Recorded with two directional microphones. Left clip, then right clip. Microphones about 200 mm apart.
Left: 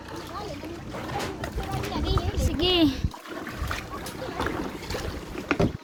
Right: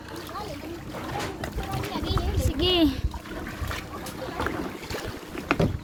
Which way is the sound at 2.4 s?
Centre (ahead or behind).